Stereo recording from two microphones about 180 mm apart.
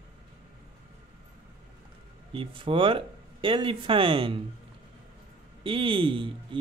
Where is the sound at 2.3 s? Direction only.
30° right (ahead or behind).